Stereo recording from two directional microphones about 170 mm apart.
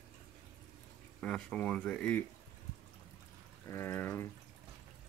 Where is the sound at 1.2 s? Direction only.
5° left (ahead or behind).